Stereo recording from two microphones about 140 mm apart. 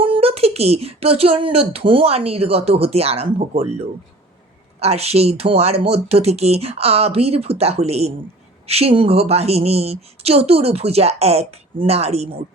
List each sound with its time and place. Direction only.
0.0 s speech: 40° right (ahead or behind)